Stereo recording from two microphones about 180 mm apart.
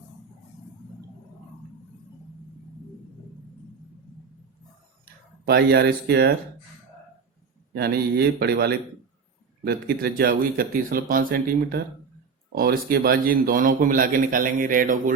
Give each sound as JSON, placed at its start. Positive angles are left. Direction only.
{"t": 5.5, "sound": "speech", "side_deg": -65}
{"t": 7.7, "sound": "speech", "side_deg": -65}